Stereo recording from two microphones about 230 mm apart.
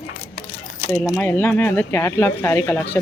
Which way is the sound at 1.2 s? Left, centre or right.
Centre.